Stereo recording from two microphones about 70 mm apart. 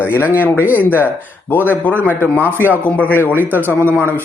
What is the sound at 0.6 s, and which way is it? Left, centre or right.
Speech, right.